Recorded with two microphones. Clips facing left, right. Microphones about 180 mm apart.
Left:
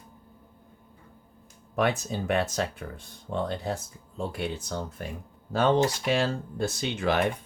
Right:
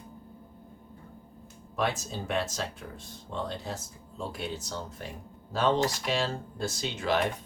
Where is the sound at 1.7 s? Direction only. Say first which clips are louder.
Left 4 dB; 60° left (ahead or behind).